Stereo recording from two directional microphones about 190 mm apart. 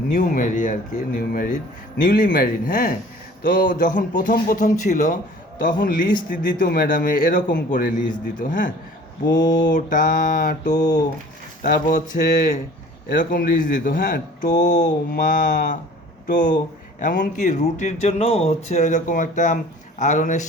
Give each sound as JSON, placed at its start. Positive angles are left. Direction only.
{"t": 0.1, "sound": "a man's voice", "side_deg": 45}
{"t": 9.3, "sound": "speech", "side_deg": 20}
{"t": 9.6, "sound": "a man's voice", "side_deg": 45}
{"t": 10.8, "sound": "speech", "side_deg": 20}
{"t": 11.6, "sound": "a man's voice", "side_deg": 45}
{"t": 17.0, "sound": "speech", "side_deg": 40}